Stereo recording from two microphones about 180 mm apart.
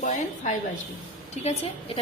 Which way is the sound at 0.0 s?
45° left (ahead or behind).